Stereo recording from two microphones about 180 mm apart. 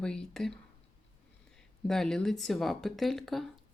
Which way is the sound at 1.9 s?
5° left (ahead or behind).